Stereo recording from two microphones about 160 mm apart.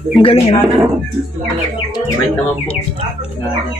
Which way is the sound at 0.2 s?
35° left (ahead or behind).